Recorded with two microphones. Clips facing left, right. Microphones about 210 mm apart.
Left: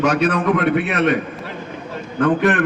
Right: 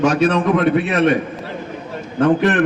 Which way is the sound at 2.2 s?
25° right (ahead or behind).